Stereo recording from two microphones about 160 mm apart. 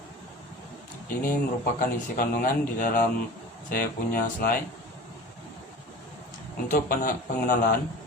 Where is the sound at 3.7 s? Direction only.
70° left (ahead or behind).